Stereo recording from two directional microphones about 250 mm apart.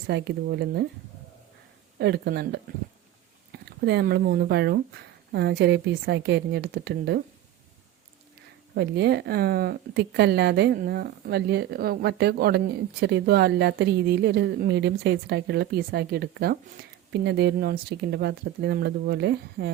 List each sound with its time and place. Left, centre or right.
0.1 s speech: right
2.0 s speech: right
8.7 s speech: right